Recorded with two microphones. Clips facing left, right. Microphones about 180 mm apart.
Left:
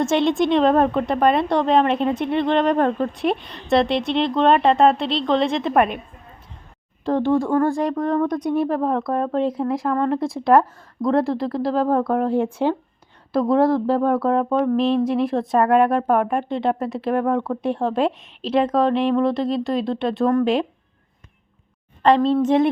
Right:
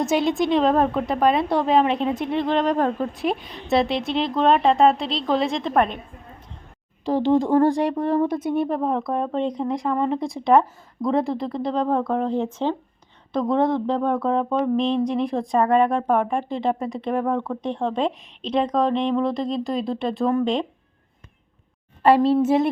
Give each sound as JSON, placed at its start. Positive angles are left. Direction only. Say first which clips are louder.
{"t": 0.0, "sound": "a woman's voice", "louder": "left 2 dB", "side_deg": 0}
{"t": 7.2, "sound": "a woman's voice", "louder": "right 1 dB", "side_deg": -15}
{"t": 8.0, "sound": "speech", "louder": "left 1 dB", "side_deg": -30}
{"t": 8.3, "sound": "a woman's voice", "louder": "left 2 dB", "side_deg": -5}
{"t": 22.0, "sound": "a woman's voice", "louder": "even", "side_deg": -10}